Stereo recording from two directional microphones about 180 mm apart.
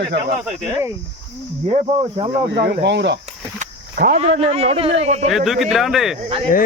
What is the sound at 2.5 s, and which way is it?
Speech, 70° right (ahead or behind).